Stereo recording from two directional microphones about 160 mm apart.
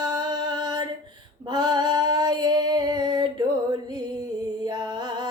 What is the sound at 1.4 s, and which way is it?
Female singing, 25° right (ahead or behind).